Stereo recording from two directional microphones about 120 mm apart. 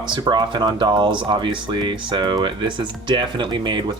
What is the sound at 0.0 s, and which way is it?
Speech, 40° right (ahead or behind).